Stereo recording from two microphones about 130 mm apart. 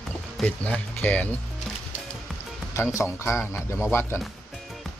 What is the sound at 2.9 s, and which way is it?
Speech, 25° left (ahead or behind).